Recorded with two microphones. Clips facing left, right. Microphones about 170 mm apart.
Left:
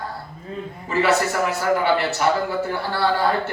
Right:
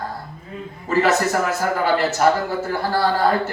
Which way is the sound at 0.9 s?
40° right (ahead or behind).